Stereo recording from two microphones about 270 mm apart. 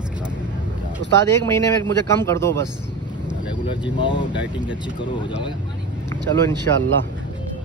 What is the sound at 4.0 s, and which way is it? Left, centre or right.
Speech, centre.